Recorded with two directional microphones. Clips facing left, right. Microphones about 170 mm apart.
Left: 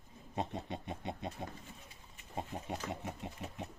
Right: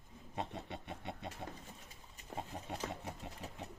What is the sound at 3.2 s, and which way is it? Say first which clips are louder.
Speech: left 4 dB; 15° left (ahead or behind).